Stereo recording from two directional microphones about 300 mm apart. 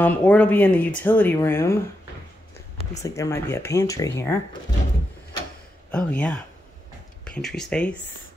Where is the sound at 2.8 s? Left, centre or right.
Centre.